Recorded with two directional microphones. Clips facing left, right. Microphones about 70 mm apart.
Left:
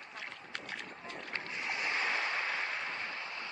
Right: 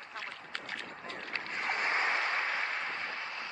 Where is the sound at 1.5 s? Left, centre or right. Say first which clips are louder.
Right 4 dB; right.